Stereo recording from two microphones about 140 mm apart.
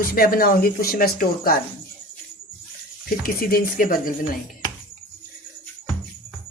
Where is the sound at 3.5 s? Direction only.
90° left.